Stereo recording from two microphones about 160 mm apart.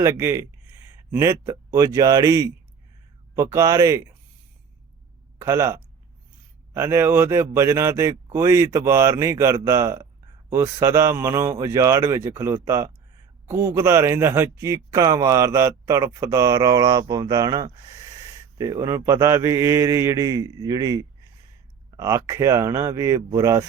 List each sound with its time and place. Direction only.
0.0 s a man's voice: 15° right (ahead or behind)
5.4 s a man's voice: 20° right (ahead or behind)